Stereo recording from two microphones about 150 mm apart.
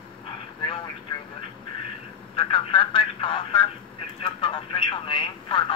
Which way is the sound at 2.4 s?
35° left (ahead or behind).